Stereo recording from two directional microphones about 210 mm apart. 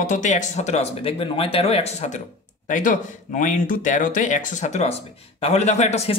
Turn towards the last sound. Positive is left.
turn(degrees=30)  # may be behind; listen again after turning